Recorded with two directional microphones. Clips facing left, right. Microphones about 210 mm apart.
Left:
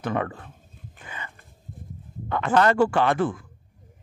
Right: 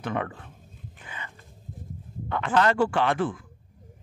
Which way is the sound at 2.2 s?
45° left (ahead or behind).